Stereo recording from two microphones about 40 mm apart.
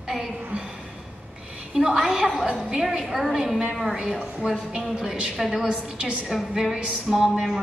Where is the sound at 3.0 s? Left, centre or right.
Centre; by 6.2 s right.